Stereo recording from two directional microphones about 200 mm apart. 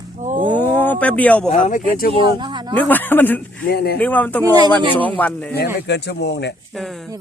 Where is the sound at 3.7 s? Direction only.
50° left (ahead or behind).